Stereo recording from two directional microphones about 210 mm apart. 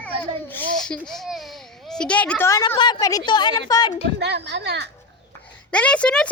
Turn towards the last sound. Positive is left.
turn(degrees=5)  # may be behind; listen again after turning